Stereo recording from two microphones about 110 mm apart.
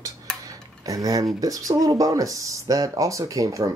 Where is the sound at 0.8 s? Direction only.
30° right (ahead or behind).